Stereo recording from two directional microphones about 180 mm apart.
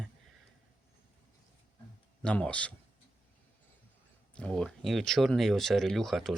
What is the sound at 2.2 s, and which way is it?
Speech, 5° left (ahead or behind).